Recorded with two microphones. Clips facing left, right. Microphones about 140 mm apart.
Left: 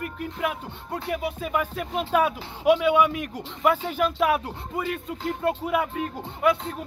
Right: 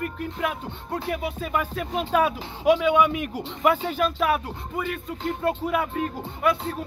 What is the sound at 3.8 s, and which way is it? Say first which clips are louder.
Speech: even; 10° left (ahead or behind).